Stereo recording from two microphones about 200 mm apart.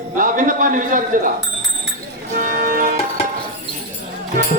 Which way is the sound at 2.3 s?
45° right (ahead or behind).